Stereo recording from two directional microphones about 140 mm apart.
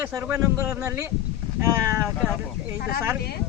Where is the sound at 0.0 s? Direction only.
15° right (ahead or behind).